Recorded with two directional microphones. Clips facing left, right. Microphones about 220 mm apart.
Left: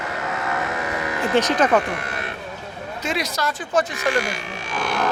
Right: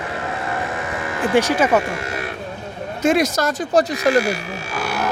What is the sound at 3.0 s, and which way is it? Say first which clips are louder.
Speech: right 9 dB; 50° right (ahead or behind).